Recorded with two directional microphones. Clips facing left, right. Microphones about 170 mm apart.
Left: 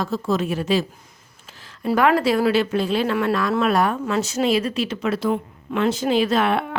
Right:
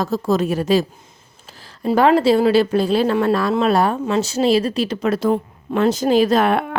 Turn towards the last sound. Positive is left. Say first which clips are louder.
# right 4 dB
turn(degrees=-45)  # may be behind; listen again after turning